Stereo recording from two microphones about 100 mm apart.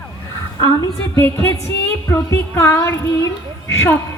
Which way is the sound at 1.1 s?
25° left (ahead or behind).